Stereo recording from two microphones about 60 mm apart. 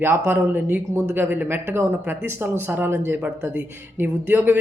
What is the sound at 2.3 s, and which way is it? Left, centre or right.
Speech, right.